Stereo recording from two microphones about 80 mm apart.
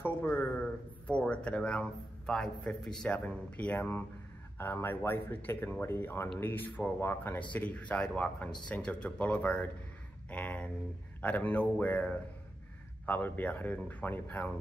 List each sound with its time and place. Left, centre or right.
0.0 s a sound: left
1.0 s a man's voice: centre
7.5 s speech: centre